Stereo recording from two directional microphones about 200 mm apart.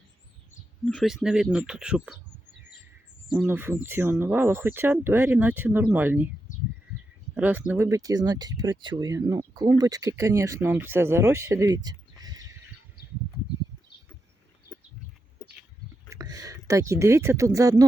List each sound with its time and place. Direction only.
0.9 s speech: centre (ahead or behind)
3.3 s speech: 10° right (ahead or behind)
7.3 s speech: 10° right (ahead or behind)
16.0 s speech: 20° right (ahead or behind)